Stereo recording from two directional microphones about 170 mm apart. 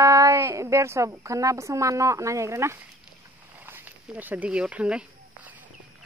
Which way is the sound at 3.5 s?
10° right (ahead or behind).